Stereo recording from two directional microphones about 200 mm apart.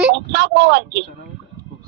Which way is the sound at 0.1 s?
65° right (ahead or behind).